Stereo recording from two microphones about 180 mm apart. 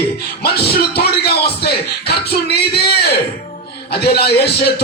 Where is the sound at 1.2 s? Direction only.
60° left (ahead or behind).